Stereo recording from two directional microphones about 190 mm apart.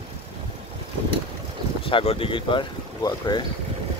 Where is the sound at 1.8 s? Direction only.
30° left (ahead or behind).